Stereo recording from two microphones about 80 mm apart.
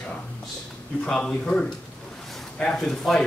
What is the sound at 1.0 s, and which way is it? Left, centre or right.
Speech, centre.